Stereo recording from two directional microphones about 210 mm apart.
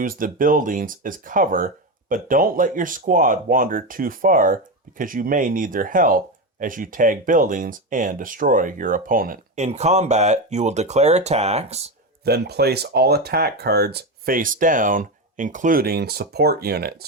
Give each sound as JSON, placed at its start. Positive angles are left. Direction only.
{"t": 0.0, "sound": "speech", "side_deg": -40}
{"t": 12.2, "sound": "speech", "side_deg": -50}